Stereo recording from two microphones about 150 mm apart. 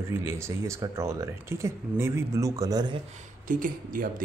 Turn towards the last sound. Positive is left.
turn(degrees=-65)  # may be behind; listen again after turning